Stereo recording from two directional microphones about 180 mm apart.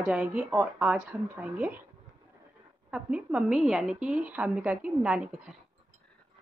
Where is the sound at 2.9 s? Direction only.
5° right (ahead or behind).